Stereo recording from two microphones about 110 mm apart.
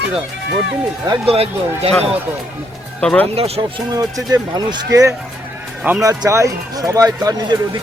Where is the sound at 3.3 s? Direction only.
65° right (ahead or behind).